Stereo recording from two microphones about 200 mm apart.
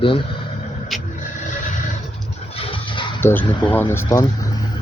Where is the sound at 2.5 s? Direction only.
25° left (ahead or behind).